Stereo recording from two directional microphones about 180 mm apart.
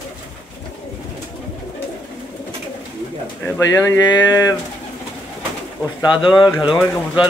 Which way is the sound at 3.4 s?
15° left (ahead or behind).